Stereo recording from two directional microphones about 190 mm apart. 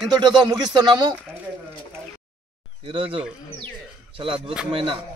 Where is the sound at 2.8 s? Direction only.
30° right (ahead or behind).